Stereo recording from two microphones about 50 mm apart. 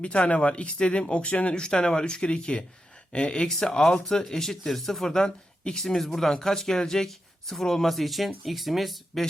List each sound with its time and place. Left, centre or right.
0.0 s speech: left; by 9.2 s centre